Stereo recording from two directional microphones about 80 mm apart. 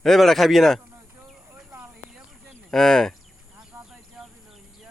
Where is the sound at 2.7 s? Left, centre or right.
Centre.